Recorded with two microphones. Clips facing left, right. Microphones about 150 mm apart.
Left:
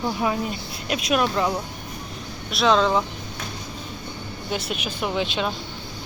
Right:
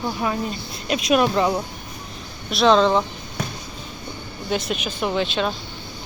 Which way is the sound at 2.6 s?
Centre (ahead or behind).